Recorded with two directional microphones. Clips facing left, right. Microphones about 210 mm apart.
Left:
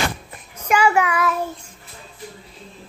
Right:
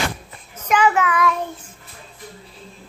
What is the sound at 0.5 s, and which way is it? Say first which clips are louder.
Child singing: even; 10° left (ahead or behind).